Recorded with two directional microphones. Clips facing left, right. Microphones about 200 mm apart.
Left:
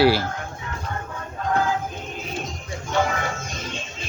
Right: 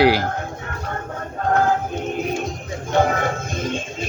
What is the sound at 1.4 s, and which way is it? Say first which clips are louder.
Music: right 4 dB; 50° right (ahead or behind).